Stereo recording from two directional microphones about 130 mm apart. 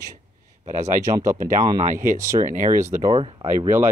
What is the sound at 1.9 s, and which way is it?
Speech, 80° right.